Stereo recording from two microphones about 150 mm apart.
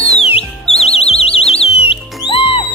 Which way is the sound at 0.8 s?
45° left (ahead or behind).